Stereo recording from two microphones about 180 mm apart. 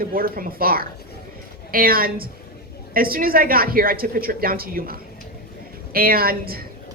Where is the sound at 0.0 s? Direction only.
55° right (ahead or behind).